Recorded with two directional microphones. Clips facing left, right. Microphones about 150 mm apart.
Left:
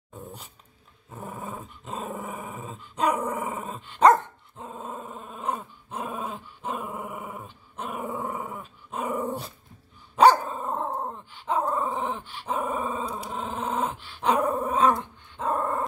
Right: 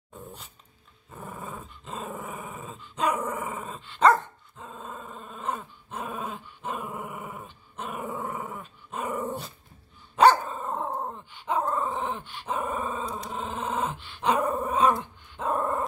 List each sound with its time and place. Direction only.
1.1 s dog: 20° left (ahead or behind)
14.7 s dog: centre (ahead or behind)